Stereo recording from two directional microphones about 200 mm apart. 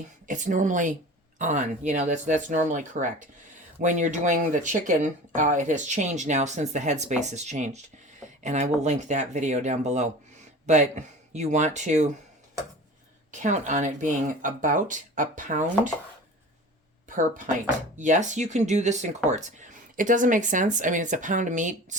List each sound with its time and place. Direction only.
0.3 s speech: 40° right (ahead or behind)
13.3 s speech: 40° right (ahead or behind)
17.1 s speech: 40° right (ahead or behind)